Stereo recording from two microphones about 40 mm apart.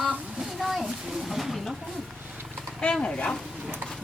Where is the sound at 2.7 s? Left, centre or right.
Left.